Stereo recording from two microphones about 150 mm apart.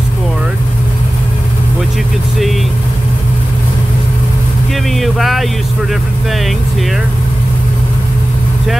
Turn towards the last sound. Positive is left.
turn(degrees=0)  # may be behind; listen again after turning